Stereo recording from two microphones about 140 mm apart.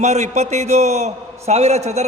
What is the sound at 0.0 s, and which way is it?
A man's voice, 55° right (ahead or behind).